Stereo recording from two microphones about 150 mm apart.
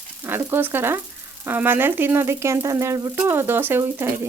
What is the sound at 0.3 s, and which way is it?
Speech, 15° right (ahead or behind).